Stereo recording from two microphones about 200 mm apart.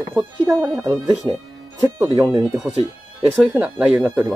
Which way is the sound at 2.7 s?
30° right (ahead or behind).